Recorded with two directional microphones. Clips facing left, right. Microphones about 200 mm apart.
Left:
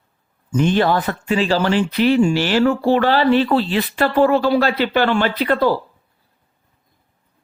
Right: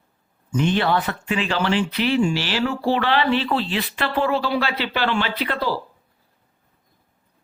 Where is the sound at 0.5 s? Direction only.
40° left (ahead or behind).